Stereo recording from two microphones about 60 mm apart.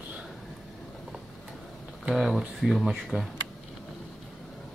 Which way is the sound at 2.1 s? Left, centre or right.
Centre.